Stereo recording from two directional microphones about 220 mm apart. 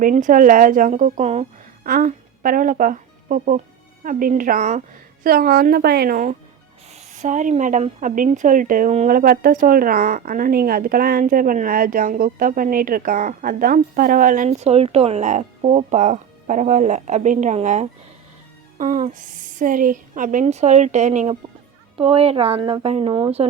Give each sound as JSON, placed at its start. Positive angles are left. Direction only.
{"t": 0.0, "sound": "a woman's voice", "side_deg": -35}